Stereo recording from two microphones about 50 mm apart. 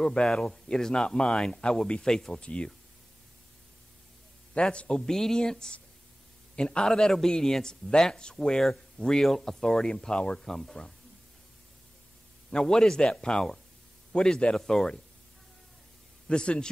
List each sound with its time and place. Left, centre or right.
0.0 s speech: centre
2.4 s speech: left
4.6 s speech: centre
10.4 s speech: centre
12.4 s speech: centre
16.3 s speech: centre